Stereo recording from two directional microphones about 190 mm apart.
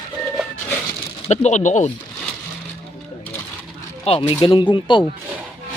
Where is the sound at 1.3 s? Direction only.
40° left (ahead or behind).